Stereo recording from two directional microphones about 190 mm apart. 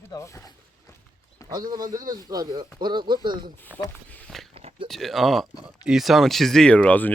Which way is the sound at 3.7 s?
10° right (ahead or behind).